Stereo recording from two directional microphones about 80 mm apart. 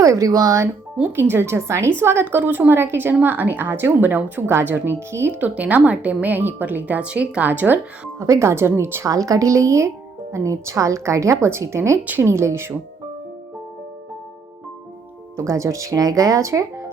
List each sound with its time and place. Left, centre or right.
0.0 s speech: right
1.1 s a woman's voice: right
5.4 s a woman's voice: centre
8.2 s speech: right
9.0 s speech: right
15.4 s speech: right